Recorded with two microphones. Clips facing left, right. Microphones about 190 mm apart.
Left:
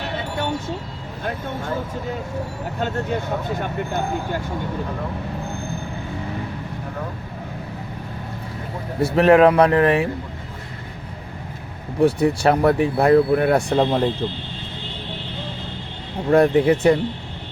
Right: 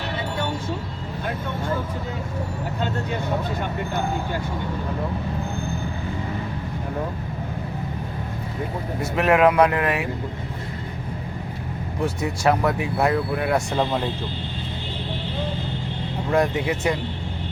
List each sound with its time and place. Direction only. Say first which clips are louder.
9.0 s speech: left 6 dB; 30° left (ahead or behind)
12.0 s speech: left 5 dB; 30° left (ahead or behind)
16.3 s speech: left 7 dB; 35° left (ahead or behind)